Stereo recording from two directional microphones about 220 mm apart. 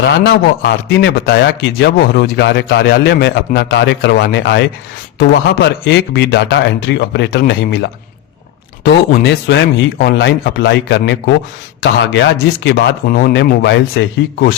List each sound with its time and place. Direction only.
0.0 s a man's voice: 50° left (ahead or behind)